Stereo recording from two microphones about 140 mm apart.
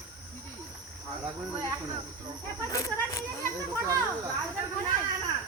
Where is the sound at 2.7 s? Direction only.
25° left (ahead or behind).